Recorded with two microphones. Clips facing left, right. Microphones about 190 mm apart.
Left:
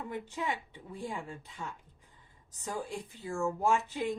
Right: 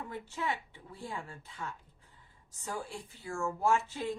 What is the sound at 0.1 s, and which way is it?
Speech, 15° left (ahead or behind).